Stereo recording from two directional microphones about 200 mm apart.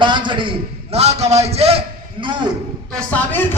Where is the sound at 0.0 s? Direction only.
25° right (ahead or behind).